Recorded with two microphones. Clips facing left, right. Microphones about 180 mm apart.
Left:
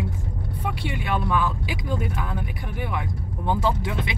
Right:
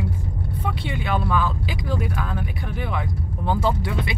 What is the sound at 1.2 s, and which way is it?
Speech, 15° left (ahead or behind).